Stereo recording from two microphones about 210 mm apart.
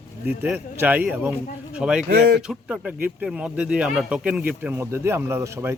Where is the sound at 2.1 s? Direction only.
50° right (ahead or behind).